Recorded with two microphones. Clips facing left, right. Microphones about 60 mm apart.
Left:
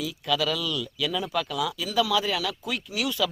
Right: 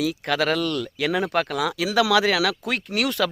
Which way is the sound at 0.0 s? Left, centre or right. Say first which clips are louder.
Right 4 dB; right.